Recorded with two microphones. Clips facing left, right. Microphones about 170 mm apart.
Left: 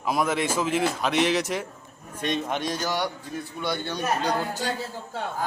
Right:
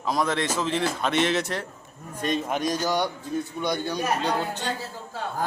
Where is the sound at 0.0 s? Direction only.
10° left (ahead or behind).